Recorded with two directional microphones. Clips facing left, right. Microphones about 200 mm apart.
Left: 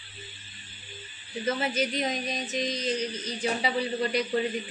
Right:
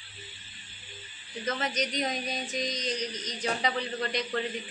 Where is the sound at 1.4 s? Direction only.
10° left (ahead or behind).